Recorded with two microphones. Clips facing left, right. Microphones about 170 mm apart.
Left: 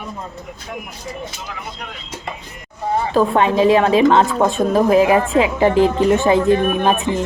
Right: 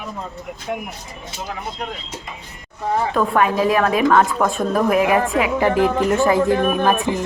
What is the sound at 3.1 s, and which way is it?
A woman's voice, 25° left (ahead or behind).